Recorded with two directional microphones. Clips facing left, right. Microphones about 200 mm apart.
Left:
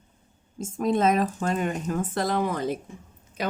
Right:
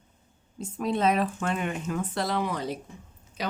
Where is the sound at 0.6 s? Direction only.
45° left (ahead or behind).